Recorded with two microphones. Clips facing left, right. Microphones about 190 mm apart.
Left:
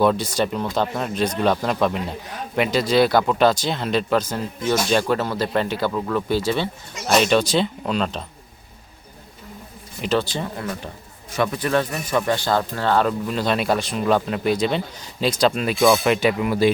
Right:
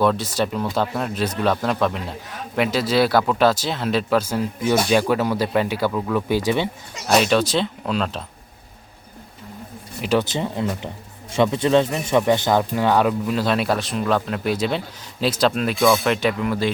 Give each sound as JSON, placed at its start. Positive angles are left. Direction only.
{"t": 0.0, "sound": "speech", "side_deg": 0}
{"t": 7.1, "sound": "speech", "side_deg": 0}
{"t": 10.2, "sound": "speech", "side_deg": -20}